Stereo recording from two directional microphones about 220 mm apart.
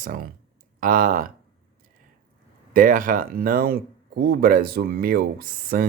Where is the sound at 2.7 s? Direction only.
40° right (ahead or behind).